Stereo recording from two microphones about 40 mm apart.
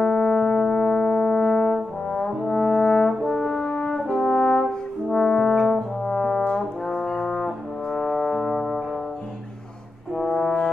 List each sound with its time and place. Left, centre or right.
0.0 s music: left
2.1 s brass instrument: centre
3.6 s french horn: left
4.3 s brass instrument: left
10.1 s brass instrument: centre